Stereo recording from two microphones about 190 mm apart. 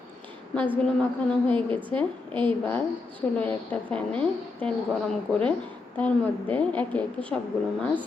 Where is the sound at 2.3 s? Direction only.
25° right (ahead or behind).